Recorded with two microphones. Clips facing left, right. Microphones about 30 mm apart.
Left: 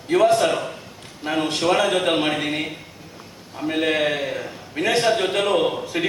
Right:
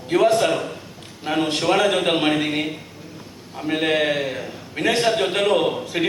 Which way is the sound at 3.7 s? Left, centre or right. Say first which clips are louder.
Right 1 dB; centre.